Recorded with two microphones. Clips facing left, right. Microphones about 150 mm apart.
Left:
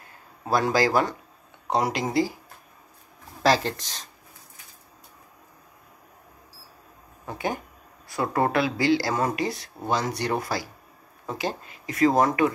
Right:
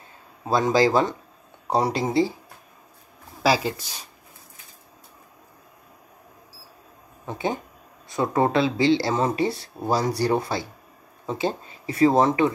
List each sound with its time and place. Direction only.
0.5 s speech: 20° right (ahead or behind)
3.4 s speech: 10° right (ahead or behind)
7.2 s speech: 20° right (ahead or behind)